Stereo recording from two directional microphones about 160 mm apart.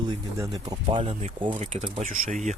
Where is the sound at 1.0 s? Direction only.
45° right (ahead or behind).